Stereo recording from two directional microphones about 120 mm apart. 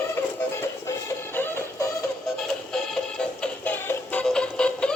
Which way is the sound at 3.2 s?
10° left (ahead or behind).